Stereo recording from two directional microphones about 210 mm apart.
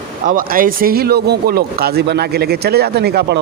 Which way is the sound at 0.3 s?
40° right (ahead or behind).